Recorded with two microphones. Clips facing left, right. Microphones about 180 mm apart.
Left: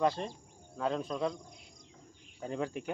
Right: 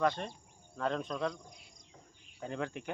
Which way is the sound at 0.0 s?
30° left (ahead or behind).